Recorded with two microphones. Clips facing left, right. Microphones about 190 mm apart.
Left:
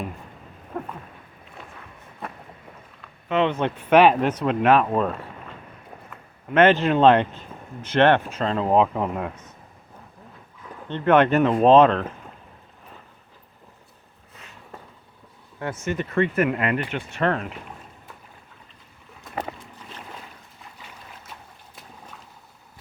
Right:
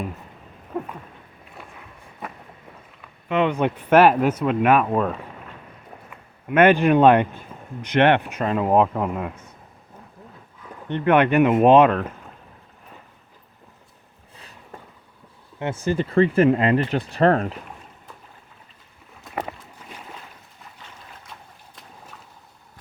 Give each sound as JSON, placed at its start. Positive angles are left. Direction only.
{"t": 0.7, "sound": "a sound", "side_deg": -5}
{"t": 1.6, "sound": "walk", "side_deg": -10}
{"t": 3.0, "sound": "speech", "side_deg": -10}
{"t": 10.8, "sound": "speech", "side_deg": -15}
{"t": 15.5, "sound": "speech", "side_deg": -20}